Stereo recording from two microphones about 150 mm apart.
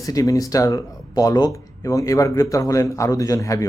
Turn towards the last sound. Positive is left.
turn(degrees=20)  # may be behind; listen again after turning